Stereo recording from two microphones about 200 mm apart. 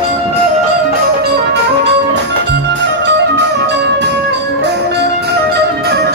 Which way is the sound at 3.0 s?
60° right (ahead or behind).